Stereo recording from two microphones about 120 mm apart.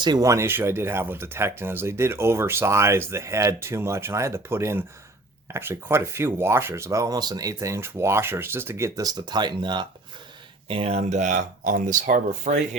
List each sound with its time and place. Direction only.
0.0 s speech: 30° right (ahead or behind)
10.7 s speech: 55° right (ahead or behind); by 12.5 s 90° right